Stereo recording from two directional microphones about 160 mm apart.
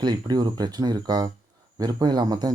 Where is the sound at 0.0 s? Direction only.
25° right (ahead or behind).